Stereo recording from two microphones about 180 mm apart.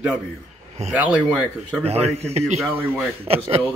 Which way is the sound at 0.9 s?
10° right (ahead or behind).